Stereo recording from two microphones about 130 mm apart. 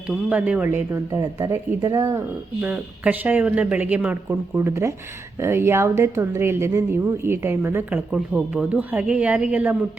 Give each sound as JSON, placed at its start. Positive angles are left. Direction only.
{"t": 0.1, "sound": "speech", "side_deg": -5}
{"t": 1.1, "sound": "speech", "side_deg": -25}
{"t": 2.6, "sound": "speech", "side_deg": -10}